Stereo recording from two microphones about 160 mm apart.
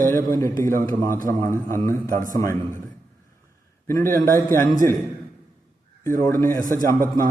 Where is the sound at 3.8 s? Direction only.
15° left (ahead or behind).